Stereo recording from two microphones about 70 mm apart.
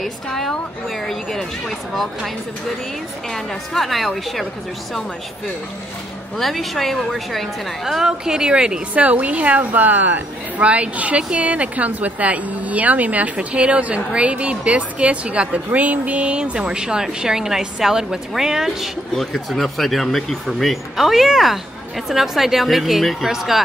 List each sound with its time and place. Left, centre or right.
0.0 s speech: centre
3.7 s speech: centre
6.3 s a woman's voice: centre